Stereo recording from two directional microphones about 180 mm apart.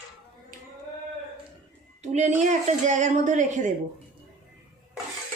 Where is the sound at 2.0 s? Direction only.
40° right (ahead or behind).